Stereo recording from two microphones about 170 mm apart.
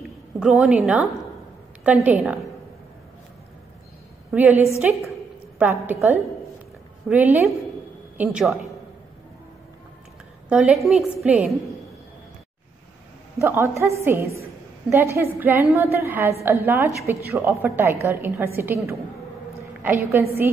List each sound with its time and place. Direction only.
0.4 s a woman's voice: 5° right (ahead or behind)
4.3 s a woman's voice: 10° right (ahead or behind)
10.5 s a woman's voice: centre (ahead or behind)
13.4 s a woman's voice: 15° right (ahead or behind)